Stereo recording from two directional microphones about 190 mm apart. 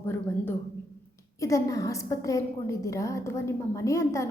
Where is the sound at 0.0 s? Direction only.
10° left (ahead or behind).